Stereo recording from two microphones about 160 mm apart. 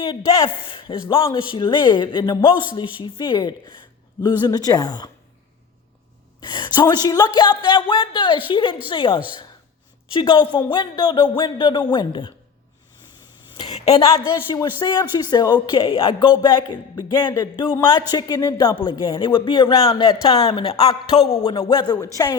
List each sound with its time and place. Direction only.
0.0 s a man's voice: 30° left (ahead or behind)
6.4 s a man's voice: 30° left (ahead or behind)
13.5 s a man's voice: 35° left (ahead or behind)